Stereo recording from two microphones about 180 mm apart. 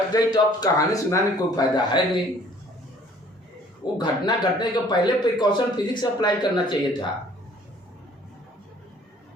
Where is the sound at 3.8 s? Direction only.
25° left (ahead or behind).